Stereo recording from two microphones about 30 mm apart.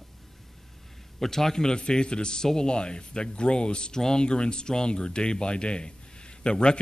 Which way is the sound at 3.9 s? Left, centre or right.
Left.